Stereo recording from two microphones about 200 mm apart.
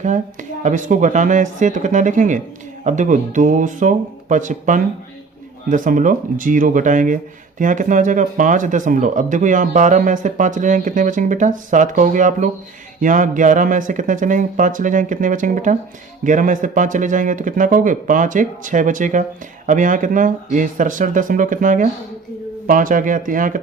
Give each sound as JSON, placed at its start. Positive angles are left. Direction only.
{"t": 0.0, "sound": "speech", "side_deg": -40}